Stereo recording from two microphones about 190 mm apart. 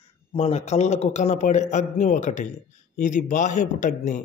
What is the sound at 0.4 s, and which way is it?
A man's voice, 35° left (ahead or behind).